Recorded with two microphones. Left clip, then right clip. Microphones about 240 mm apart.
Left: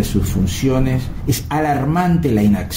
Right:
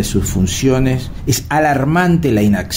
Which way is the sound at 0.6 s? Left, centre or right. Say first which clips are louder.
Right 4 dB; right.